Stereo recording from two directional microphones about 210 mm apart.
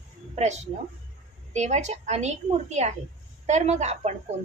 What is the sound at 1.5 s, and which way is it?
A woman's voice, 35° right (ahead or behind).